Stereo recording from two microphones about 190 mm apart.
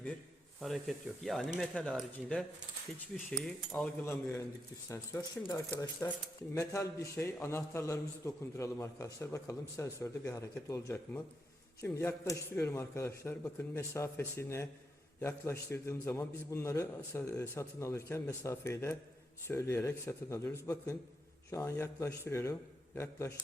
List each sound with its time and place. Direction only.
0.6 s speech: centre (ahead or behind)
4.0 s a man's voice: 15° left (ahead or behind)
5.4 s speech: 25° left (ahead or behind)
6.5 s a man's voice: 15° left (ahead or behind)